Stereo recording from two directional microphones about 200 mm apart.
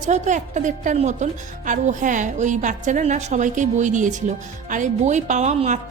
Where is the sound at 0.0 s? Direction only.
40° right (ahead or behind).